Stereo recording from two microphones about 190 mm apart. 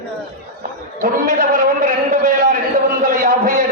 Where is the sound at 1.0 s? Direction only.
45° right (ahead or behind).